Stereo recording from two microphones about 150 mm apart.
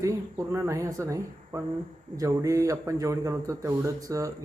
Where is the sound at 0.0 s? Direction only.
20° right (ahead or behind).